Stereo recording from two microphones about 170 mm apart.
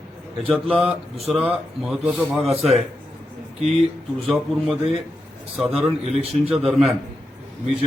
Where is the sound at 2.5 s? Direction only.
35° right (ahead or behind).